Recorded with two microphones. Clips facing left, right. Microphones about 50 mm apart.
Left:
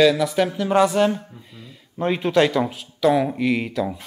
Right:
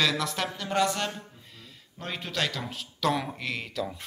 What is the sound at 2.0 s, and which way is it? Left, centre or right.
Speech, left.